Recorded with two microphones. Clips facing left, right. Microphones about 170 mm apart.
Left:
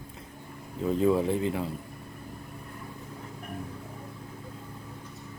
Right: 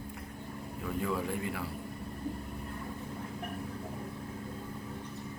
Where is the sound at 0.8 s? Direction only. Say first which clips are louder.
Left 10 dB; 25° left (ahead or behind).